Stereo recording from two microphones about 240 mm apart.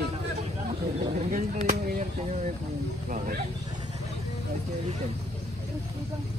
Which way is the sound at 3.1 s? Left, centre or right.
Right.